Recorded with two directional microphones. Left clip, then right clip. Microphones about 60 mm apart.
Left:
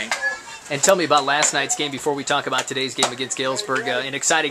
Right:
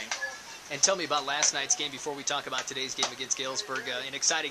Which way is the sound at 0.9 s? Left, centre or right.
Right.